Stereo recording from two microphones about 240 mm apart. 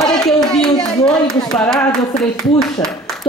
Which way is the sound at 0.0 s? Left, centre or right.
Centre.